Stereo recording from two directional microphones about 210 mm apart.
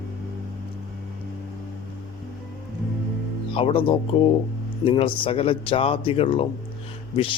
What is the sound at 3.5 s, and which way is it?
A man's voice, 25° left (ahead or behind).